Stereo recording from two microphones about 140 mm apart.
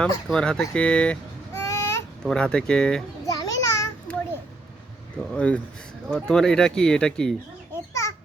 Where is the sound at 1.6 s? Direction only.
20° left (ahead or behind).